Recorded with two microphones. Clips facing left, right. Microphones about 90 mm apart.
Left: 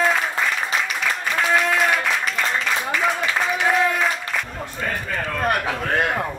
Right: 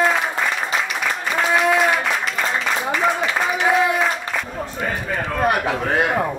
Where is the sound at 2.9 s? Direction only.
5° right (ahead or behind).